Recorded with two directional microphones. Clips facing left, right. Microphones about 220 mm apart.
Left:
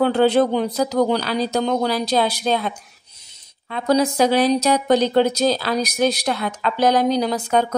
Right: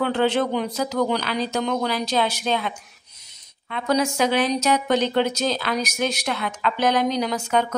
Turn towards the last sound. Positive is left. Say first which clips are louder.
# left 3 dB
turn(degrees=35)  # may be behind; listen again after turning